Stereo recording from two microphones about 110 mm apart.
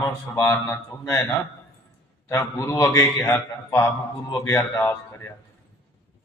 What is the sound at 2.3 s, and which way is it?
A man's voice, 25° left (ahead or behind).